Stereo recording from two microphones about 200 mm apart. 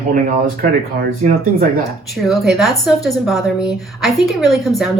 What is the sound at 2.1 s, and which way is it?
A woman's voice, centre (ahead or behind).